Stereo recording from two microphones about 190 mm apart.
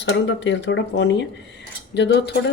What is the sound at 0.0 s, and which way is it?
Speech, 70° left (ahead or behind).